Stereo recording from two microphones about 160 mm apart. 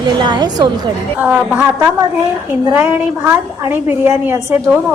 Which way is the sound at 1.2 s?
10° right (ahead or behind).